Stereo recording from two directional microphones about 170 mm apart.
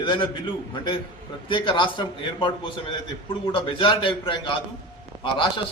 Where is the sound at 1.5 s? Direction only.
30° left (ahead or behind).